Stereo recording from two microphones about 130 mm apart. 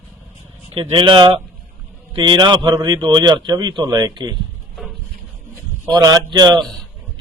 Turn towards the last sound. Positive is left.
turn(degrees=-30)  # may be behind; listen again after turning